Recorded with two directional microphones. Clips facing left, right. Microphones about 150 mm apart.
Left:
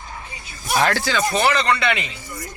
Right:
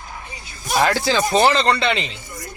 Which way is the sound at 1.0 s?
30° right (ahead or behind).